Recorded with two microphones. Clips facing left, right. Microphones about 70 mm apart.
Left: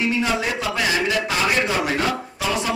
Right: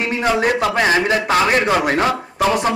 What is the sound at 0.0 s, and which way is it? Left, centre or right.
A man's voice, right.